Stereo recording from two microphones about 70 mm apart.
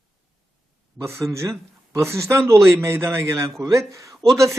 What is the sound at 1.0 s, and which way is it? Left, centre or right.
A man's voice, right.